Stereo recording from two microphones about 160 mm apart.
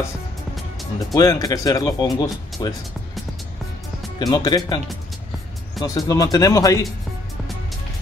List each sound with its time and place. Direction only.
0.9 s speech: 20° left (ahead or behind)
4.2 s speech: 25° left (ahead or behind)